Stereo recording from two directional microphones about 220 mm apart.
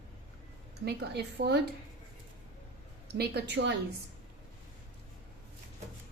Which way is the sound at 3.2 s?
50° right (ahead or behind).